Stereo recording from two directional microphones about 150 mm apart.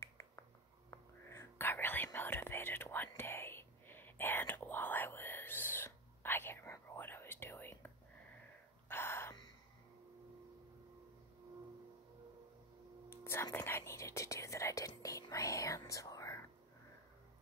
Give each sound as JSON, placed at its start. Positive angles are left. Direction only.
{"t": 0.0, "sound": "whispering", "side_deg": 20}
{"t": 8.8, "sound": "a sound", "side_deg": 15}
{"t": 13.1, "sound": "whispering", "side_deg": 15}